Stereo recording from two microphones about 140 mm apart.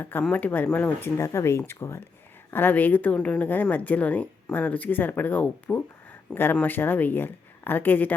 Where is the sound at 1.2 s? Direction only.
25° left (ahead or behind).